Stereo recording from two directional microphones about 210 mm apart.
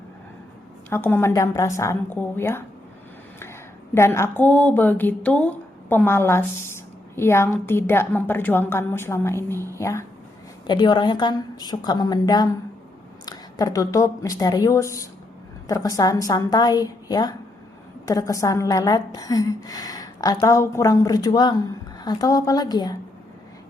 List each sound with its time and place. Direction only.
0.9 s a woman's voice: 10° left (ahead or behind)
3.9 s a woman's voice: 10° left (ahead or behind)